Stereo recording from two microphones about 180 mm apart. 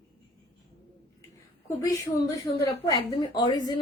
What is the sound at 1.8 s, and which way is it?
A woman's voice, 15° left (ahead or behind).